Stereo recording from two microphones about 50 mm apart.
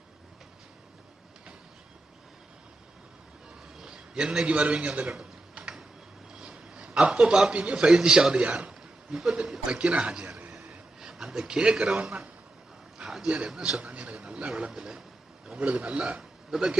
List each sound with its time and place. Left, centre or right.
3.8 s a sound: centre
4.4 s speech: right
5.1 s typing: centre
6.4 s a sound: centre
7.1 s a man's voice: centre
8.5 s a sound: centre
9.6 s speech: right
11.0 s speech: centre
13.2 s a man's voice: centre
15.5 s a man's voice: right